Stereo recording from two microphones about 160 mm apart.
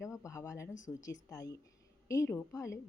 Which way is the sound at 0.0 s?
20° left (ahead or behind).